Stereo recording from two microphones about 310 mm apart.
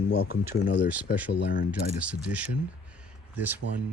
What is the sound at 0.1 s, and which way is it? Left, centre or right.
Speech, left.